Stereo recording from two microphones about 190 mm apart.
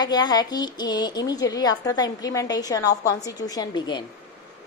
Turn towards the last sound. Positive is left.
turn(degrees=25)  # may be behind; listen again after turning